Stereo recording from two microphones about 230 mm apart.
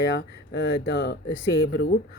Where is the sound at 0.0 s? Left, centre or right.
Left.